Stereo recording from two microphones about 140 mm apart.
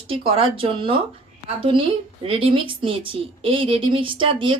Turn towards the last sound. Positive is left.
turn(degrees=-40)  # may be behind; listen again after turning